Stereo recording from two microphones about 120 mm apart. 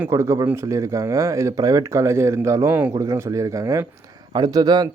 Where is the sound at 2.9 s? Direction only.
25° right (ahead or behind).